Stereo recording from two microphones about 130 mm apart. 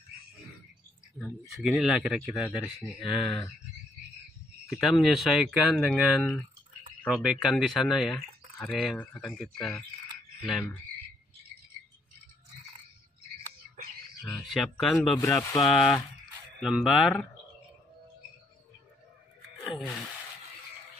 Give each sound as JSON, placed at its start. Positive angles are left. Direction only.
{"t": 1.6, "sound": "speech", "side_deg": -5}
{"t": 4.6, "sound": "speech", "side_deg": 0}
{"t": 14.4, "sound": "speech", "side_deg": 0}
{"t": 15.1, "sound": "speech", "side_deg": 25}
{"t": 16.6, "sound": "speech", "side_deg": -5}
{"t": 19.6, "sound": "speech", "side_deg": 0}